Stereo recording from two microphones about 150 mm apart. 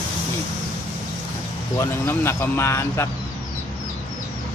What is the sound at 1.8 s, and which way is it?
Speech, 15° left (ahead or behind).